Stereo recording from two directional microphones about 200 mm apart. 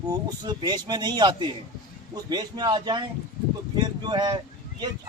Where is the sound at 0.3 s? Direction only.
20° right (ahead or behind).